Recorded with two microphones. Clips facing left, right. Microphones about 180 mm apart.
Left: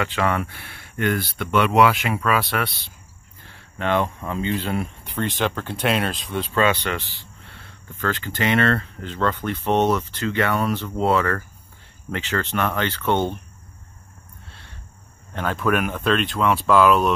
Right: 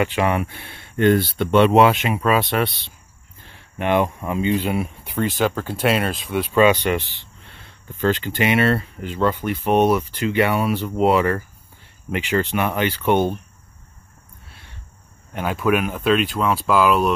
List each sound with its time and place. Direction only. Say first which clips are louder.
0.0 s speech: right 3 dB; 15° right (ahead or behind)
6.3 s speech: right 5 dB; 15° right (ahead or behind)
15.3 s speech: right 2 dB; 10° right (ahead or behind)